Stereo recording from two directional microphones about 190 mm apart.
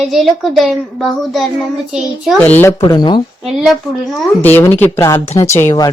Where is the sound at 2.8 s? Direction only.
25° left (ahead or behind).